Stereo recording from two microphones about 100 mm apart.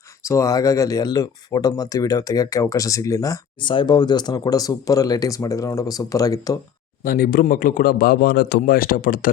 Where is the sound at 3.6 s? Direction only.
50° left (ahead or behind); by 6.5 s 35° left (ahead or behind).